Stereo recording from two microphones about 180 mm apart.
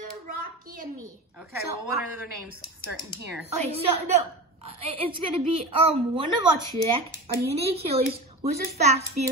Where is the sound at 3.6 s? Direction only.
35° right (ahead or behind).